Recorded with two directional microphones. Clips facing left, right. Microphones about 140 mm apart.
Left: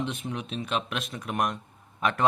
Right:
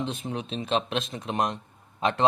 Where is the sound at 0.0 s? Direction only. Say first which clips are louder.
Right 1 dB; 30° right (ahead or behind).